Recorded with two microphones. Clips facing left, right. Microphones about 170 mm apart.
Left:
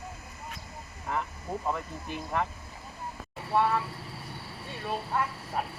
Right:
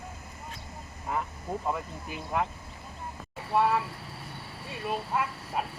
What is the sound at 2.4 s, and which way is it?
Speech, 5° right (ahead or behind).